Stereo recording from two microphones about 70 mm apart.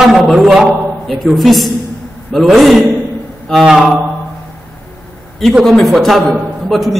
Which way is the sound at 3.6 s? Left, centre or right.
Centre.